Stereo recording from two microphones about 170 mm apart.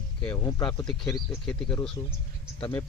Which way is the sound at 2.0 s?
25° left (ahead or behind).